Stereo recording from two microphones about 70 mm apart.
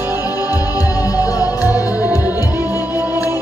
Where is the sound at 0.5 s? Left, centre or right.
Left.